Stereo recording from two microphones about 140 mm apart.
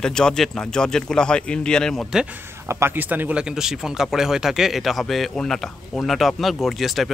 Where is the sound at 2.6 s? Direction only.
15° right (ahead or behind).